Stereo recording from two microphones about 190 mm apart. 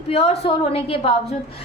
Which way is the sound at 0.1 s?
30° left (ahead or behind).